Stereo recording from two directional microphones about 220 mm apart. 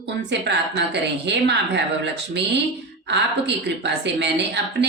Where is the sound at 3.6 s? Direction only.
50° right (ahead or behind).